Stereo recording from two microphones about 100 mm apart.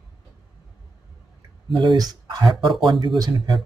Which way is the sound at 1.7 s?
50° right (ahead or behind).